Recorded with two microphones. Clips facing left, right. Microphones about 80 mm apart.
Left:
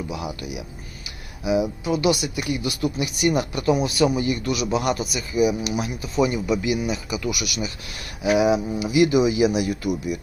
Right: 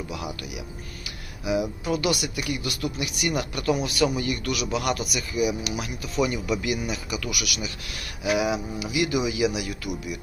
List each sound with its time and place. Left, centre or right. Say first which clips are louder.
0.1 s speech: left 3 dB; left